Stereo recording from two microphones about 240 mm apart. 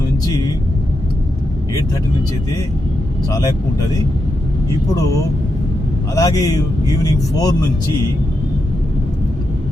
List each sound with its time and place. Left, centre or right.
0.3 s vehicle: centre
3.2 s speech: centre
6.1 s speech: centre